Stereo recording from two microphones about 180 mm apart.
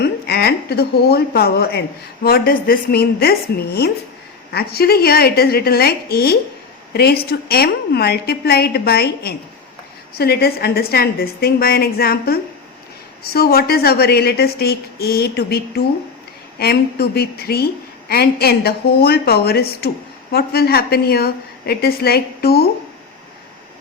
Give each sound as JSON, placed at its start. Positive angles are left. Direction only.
{"t": 0.0, "sound": "a woman's voice", "side_deg": 60}